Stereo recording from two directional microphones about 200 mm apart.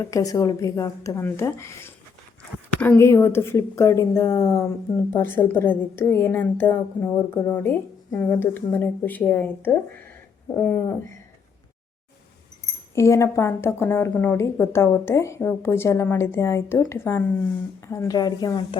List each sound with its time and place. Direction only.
0.0 s a woman's voice: 15° left (ahead or behind)
12.9 s a woman's voice: 15° left (ahead or behind)